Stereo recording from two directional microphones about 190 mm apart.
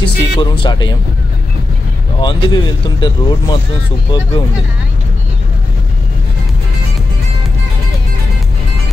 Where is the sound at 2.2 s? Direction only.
25° left (ahead or behind).